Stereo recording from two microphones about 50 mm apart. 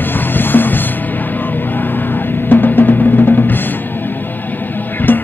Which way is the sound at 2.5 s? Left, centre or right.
Left.